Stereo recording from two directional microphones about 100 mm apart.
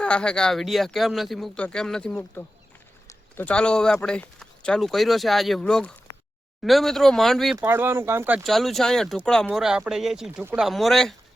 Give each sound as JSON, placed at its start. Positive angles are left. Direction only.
{"t": 0.0, "sound": "speech", "side_deg": 10}
{"t": 3.4, "sound": "speech", "side_deg": 10}
{"t": 7.5, "sound": "speech", "side_deg": -20}
{"t": 8.4, "sound": "speech", "side_deg": 0}